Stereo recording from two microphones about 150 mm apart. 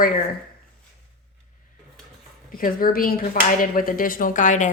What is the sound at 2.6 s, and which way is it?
Speech, 70° left (ahead or behind).